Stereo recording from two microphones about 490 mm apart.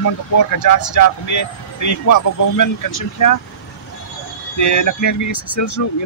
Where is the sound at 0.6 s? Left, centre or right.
Left.